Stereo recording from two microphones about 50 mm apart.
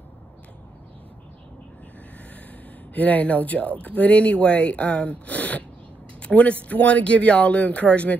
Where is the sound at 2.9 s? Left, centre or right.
Left.